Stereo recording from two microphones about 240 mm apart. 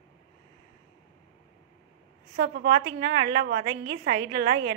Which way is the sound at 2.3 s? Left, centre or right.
Right.